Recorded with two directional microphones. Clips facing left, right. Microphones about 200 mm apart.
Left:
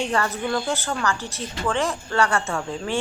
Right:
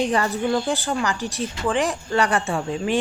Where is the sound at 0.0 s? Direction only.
15° right (ahead or behind).